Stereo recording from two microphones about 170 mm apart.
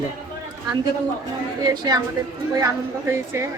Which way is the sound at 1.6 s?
25° right (ahead or behind).